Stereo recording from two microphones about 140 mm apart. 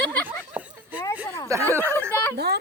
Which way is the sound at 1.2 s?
25° left (ahead or behind).